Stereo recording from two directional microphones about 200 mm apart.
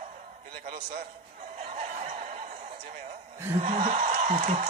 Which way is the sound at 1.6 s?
35° right (ahead or behind).